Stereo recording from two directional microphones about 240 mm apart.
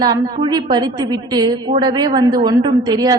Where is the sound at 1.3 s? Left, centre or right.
Centre.